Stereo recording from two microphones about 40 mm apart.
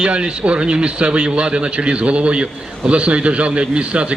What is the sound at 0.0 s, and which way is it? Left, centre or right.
A man's voice, right.